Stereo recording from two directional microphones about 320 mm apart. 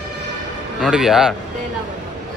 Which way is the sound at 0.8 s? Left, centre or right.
Centre.